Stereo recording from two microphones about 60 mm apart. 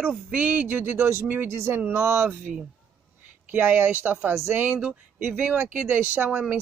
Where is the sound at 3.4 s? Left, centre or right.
Right.